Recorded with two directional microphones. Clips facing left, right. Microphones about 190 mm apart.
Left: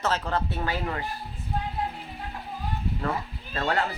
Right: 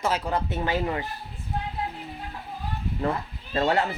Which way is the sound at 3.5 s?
20° right (ahead or behind).